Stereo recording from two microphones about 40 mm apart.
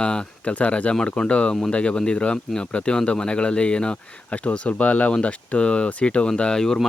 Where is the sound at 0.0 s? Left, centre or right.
Left.